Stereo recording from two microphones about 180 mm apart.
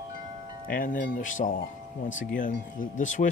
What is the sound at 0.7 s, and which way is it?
Speech, 50° left (ahead or behind).